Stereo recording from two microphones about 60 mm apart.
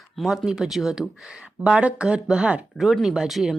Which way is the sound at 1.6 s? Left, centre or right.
Centre.